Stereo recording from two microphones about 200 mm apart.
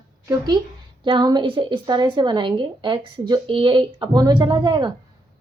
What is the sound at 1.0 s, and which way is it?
Speech, 20° right (ahead or behind).